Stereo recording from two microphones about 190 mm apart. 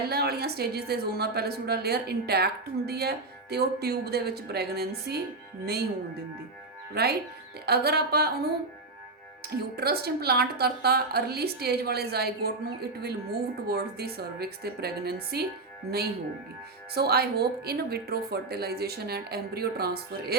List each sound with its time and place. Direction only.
0.0 s a woman's voice: 55° right (ahead or behind)
6.9 s a woman's voice: 55° right (ahead or behind)
16.9 s a woman's voice: 55° right (ahead or behind)